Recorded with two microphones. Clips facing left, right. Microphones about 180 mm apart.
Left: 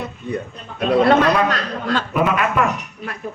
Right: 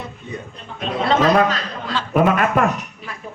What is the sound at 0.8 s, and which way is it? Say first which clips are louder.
Speech: left 4 dB; 60° left (ahead or behind).